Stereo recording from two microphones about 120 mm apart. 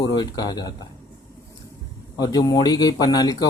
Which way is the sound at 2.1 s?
30° left (ahead or behind).